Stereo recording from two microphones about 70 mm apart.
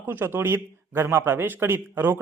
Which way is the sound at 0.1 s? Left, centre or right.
Right.